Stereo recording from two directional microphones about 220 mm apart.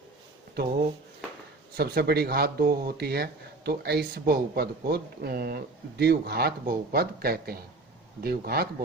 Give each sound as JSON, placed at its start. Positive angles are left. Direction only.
{"t": 0.5, "sound": "speech", "side_deg": -45}